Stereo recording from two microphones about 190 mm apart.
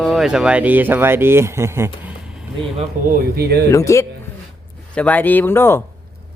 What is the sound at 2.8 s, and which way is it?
Speech, 50° right (ahead or behind).